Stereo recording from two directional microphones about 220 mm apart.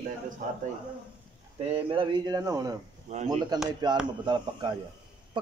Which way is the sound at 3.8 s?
20° right (ahead or behind).